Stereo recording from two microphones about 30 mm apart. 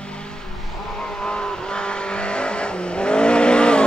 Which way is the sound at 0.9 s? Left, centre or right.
Left.